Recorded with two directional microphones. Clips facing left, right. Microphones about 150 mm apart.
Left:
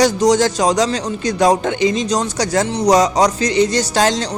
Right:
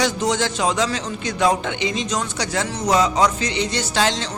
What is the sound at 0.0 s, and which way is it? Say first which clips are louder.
Speech: left 8 dB; 40° left (ahead or behind).